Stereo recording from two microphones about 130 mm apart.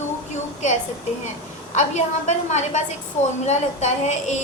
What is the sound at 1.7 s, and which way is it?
Female singing, 65° left (ahead or behind).